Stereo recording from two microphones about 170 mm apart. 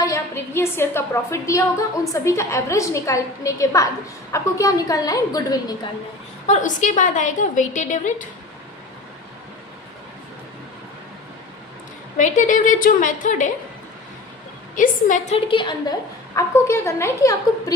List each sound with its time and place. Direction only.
0.0 s a woman's voice: 15° left (ahead or behind)
6.5 s a woman's voice: 45° left (ahead or behind)
12.1 s a woman's voice: 50° left (ahead or behind)
14.8 s a woman's voice: 50° left (ahead or behind)
15.4 s a woman's voice: 30° left (ahead or behind)